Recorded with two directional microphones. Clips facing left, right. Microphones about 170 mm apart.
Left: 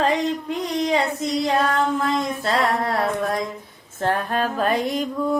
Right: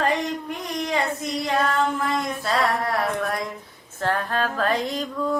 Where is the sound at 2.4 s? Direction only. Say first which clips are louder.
Even; 25° left (ahead or behind).